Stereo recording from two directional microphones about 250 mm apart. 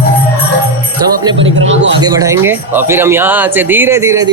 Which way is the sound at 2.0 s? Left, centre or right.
Centre.